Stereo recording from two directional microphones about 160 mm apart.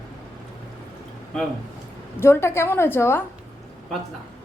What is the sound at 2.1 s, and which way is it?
A man's voice, 15° left (ahead or behind).